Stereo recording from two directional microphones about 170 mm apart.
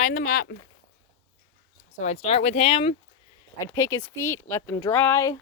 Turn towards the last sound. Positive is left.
turn(degrees=15)  # may be behind; listen again after turning